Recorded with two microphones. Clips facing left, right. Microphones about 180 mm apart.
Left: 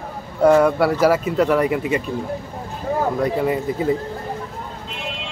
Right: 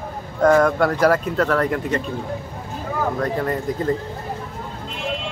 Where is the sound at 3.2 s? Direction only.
5° left (ahead or behind).